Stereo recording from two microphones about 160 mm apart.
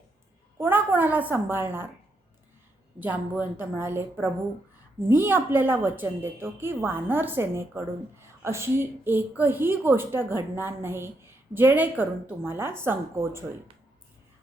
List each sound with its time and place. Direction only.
0.6 s a woman's voice: 10° right (ahead or behind)
3.0 s a woman's voice: 10° right (ahead or behind)